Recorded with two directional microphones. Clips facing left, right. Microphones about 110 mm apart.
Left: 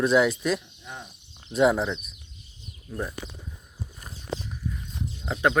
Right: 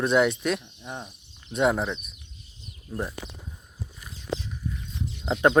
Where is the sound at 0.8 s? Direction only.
30° right (ahead or behind).